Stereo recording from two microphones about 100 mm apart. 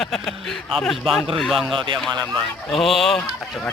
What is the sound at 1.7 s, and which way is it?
Speech, 55° right (ahead or behind).